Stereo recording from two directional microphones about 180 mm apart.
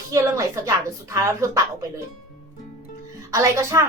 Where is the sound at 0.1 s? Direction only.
15° right (ahead or behind).